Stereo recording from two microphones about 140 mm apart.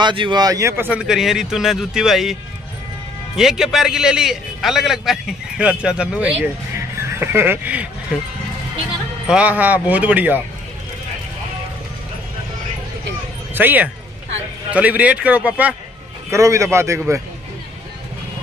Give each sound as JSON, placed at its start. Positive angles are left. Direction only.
{"t": 0.0, "sound": "a man's voice", "side_deg": -35}
{"t": 3.3, "sound": "a man's voice", "side_deg": -5}
{"t": 9.3, "sound": "speech", "side_deg": -10}
{"t": 13.6, "sound": "speech", "side_deg": -15}
{"t": 16.3, "sound": "a man's voice", "side_deg": -20}